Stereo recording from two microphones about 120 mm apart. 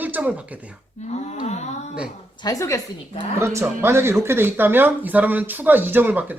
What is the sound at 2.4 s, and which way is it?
Speech, 25° left (ahead or behind).